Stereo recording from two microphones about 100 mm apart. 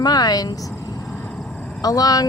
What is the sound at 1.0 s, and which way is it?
Vehicle, 10° left (ahead or behind).